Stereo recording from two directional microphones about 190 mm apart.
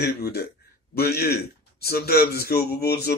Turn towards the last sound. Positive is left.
turn(degrees=55)  # may be behind; listen again after turning